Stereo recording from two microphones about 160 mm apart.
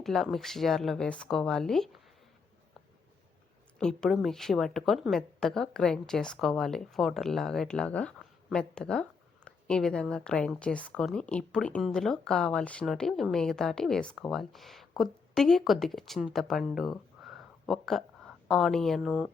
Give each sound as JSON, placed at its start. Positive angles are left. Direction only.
{"t": 0.0, "sound": "speech", "side_deg": 0}
{"t": 3.8, "sound": "speech", "side_deg": 5}